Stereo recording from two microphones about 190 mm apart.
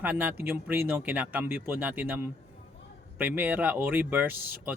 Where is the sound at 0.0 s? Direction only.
10° right (ahead or behind).